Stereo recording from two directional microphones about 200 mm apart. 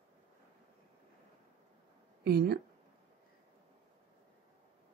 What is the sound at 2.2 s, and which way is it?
Speech, 50° right (ahead or behind).